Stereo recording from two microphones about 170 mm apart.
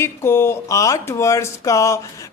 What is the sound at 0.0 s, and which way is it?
Speech, 15° left (ahead or behind).